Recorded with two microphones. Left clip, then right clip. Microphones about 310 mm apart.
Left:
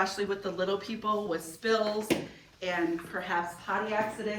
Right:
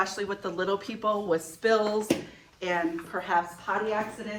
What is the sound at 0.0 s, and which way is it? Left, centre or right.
Speech, centre.